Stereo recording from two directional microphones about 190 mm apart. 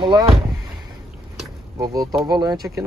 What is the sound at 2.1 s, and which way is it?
Speech, 15° right (ahead or behind).